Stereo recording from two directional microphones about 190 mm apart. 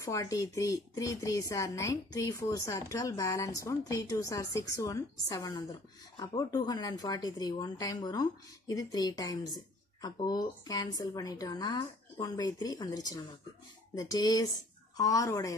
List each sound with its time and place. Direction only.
0.0 s a woman's voice: 15° left (ahead or behind)